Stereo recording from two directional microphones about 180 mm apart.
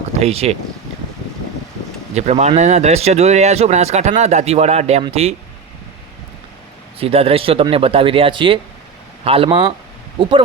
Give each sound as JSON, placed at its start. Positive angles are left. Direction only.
{"t": 0.2, "sound": "speech", "side_deg": -35}
{"t": 2.1, "sound": "speech", "side_deg": -40}
{"t": 7.0, "sound": "speech", "side_deg": -35}